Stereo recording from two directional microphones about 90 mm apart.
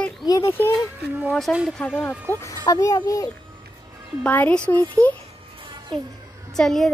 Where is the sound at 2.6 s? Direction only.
40° left (ahead or behind).